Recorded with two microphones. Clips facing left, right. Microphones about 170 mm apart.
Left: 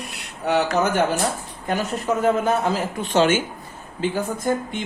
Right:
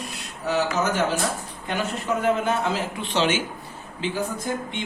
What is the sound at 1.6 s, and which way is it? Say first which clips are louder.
A man's voice: left 4 dB; 40° left (ahead or behind).